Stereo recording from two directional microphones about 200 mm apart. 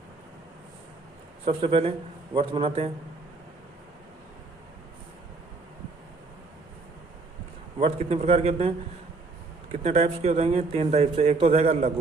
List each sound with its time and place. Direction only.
1.5 s a man's voice: 30° right (ahead or behind)
7.8 s a man's voice: 35° right (ahead or behind)
9.8 s a man's voice: 35° right (ahead or behind)